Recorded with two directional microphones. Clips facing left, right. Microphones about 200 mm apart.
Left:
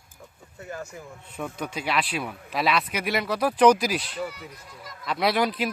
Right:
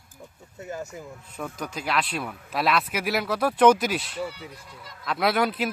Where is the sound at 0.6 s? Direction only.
20° right (ahead or behind).